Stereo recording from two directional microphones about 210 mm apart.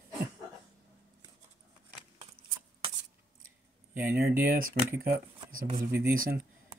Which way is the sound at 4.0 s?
45° right (ahead or behind).